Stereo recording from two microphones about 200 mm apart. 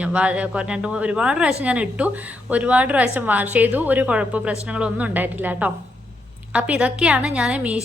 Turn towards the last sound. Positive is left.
turn(degrees=-5)  # may be behind; listen again after turning